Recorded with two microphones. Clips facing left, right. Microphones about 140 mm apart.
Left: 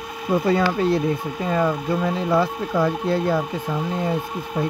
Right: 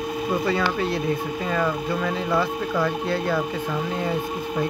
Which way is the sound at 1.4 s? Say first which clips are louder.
Left 4 dB; 25° left (ahead or behind).